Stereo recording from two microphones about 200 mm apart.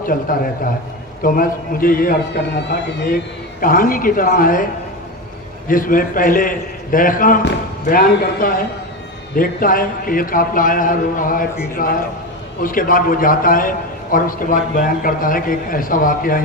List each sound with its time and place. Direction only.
0.1 s a man's voice: 40° left (ahead or behind)
3.6 s a man's voice: 45° left (ahead or behind)